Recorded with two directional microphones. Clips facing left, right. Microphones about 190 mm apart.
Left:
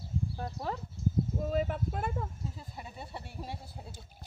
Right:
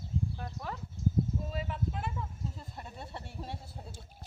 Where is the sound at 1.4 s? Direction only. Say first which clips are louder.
Left 6 dB; 50° left (ahead or behind).